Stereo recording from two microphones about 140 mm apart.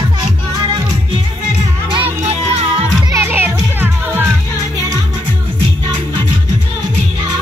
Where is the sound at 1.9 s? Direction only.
45° right (ahead or behind).